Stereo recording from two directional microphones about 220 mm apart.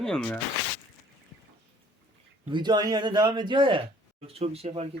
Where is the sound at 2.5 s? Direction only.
20° right (ahead or behind).